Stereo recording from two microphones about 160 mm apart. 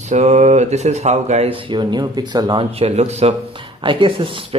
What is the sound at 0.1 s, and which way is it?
Speech, 45° right (ahead or behind).